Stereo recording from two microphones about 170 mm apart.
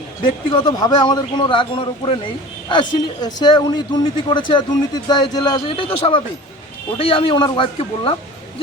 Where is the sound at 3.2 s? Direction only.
25° left (ahead or behind).